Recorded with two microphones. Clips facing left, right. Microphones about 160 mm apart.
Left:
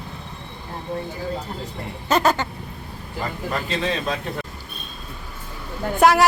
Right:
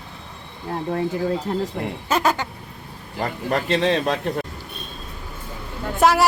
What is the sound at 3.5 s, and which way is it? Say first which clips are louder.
Speech: right 6 dB; 70° right (ahead or behind).